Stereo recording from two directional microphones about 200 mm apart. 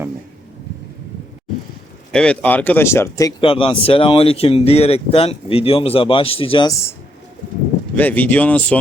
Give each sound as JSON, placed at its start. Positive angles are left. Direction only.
{"t": 2.1, "sound": "speech", "side_deg": 5}
{"t": 3.4, "sound": "speech", "side_deg": 25}
{"t": 7.9, "sound": "speech", "side_deg": 10}